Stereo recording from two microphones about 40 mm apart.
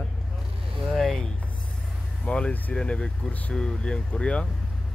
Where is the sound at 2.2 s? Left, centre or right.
Left.